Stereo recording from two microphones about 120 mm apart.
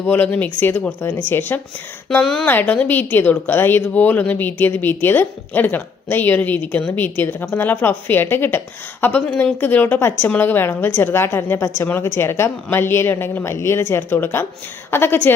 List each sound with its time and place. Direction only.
0.0 s a woman's voice: 15° left (ahead or behind)
2.2 s speech: 5° left (ahead or behind)
2.5 s a woman's voice: 15° left (ahead or behind)